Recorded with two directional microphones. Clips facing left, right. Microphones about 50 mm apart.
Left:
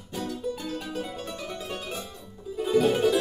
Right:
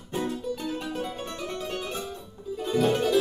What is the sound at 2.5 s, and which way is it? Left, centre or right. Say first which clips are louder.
Music: left 2 dB; centre.